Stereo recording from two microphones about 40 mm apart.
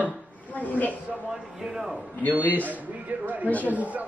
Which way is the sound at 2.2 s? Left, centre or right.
Left.